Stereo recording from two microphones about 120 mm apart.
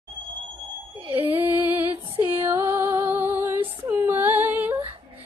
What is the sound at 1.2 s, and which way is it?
Music, 15° right (ahead or behind).